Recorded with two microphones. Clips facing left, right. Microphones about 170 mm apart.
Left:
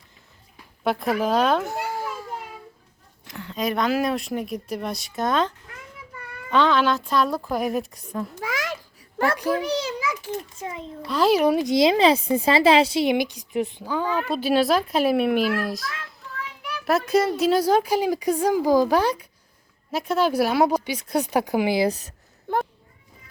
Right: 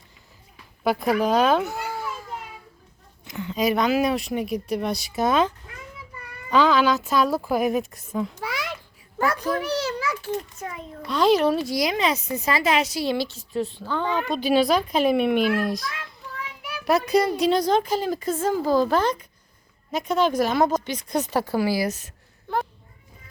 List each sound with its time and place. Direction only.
0.9 s speech: centre (ahead or behind)
3.2 s speech: centre (ahead or behind)
8.5 s a sound: 45° left (ahead or behind)
9.4 s a child's voice: 15° left (ahead or behind)
10.6 s a child's voice: 25° left (ahead or behind)
11.0 s a woman's voice: 5° left (ahead or behind); by 21.8 s 20° left (ahead or behind)
21.8 s a sound: 35° left (ahead or behind)